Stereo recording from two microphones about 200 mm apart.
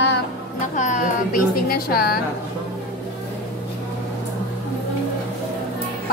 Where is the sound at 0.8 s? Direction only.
40° left (ahead or behind).